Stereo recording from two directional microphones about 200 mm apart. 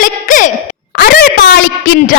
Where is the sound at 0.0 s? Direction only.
40° left (ahead or behind).